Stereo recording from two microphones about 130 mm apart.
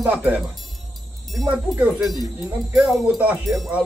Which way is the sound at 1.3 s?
Centre (ahead or behind).